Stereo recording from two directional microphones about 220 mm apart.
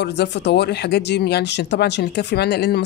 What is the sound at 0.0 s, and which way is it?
Speech, 50° left (ahead or behind).